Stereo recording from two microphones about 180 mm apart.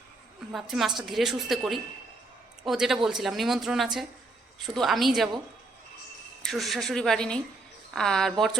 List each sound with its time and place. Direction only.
0.5 s a woman's voice: centre (ahead or behind)
6.4 s a woman's voice: centre (ahead or behind)